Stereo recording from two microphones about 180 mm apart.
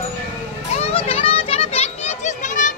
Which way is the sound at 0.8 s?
35° left (ahead or behind).